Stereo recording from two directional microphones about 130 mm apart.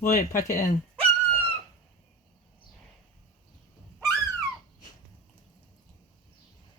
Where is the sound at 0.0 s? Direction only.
80° left.